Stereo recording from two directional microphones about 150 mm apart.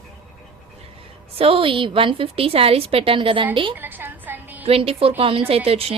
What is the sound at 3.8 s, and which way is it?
Music, 10° right (ahead or behind).